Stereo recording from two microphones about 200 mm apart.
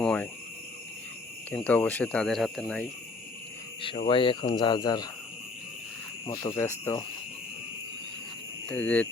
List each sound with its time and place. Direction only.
0.0 s cricket: 5° left (ahead or behind)
1.5 s speech: 5° left (ahead or behind)
3.8 s speech: 25° left (ahead or behind)
6.2 s speech: 20° left (ahead or behind)
8.7 s speech: 5° left (ahead or behind)